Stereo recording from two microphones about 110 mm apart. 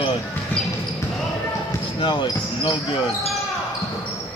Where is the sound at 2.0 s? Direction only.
45° left (ahead or behind).